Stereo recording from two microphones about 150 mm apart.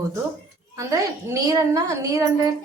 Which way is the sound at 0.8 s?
20° right (ahead or behind).